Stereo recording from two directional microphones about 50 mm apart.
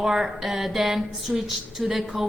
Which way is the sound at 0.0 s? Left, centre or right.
Centre.